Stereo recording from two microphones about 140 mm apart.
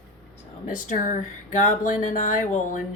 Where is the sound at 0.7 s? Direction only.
65° left (ahead or behind).